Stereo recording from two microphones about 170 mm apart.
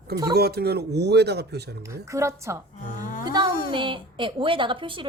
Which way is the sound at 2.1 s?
15° right (ahead or behind).